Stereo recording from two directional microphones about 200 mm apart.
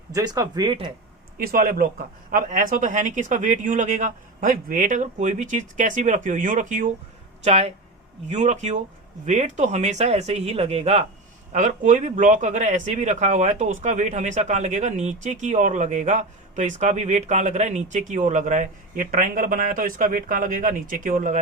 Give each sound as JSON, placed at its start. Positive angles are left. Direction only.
{"t": 0.1, "sound": "speech", "side_deg": -15}
{"t": 1.4, "sound": "speech", "side_deg": -45}